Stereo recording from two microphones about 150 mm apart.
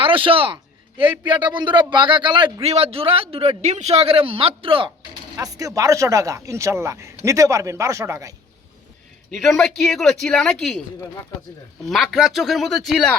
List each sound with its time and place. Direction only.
0.0 s a sound: 35° right (ahead or behind)
1.5 s a man's voice: 30° right (ahead or behind)
5.4 s speech: 20° right (ahead or behind)
9.3 s speech: centre (ahead or behind)
11.9 s speech: centre (ahead or behind)